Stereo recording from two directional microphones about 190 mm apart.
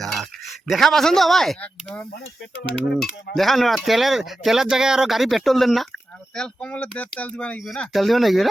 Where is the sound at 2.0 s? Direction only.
60° left (ahead or behind).